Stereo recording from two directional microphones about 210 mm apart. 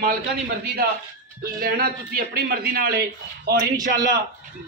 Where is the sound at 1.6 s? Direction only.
45° right (ahead or behind).